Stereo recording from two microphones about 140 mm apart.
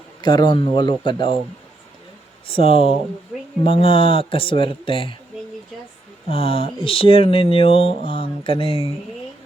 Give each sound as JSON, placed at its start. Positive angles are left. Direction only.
{"t": 0.2, "sound": "speech", "side_deg": 30}
{"t": 2.5, "sound": "speech", "side_deg": 40}
{"t": 6.2, "sound": "speech", "side_deg": 40}